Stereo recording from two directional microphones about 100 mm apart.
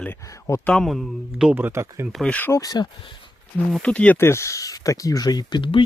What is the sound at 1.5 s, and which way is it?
Speech, 25° right (ahead or behind).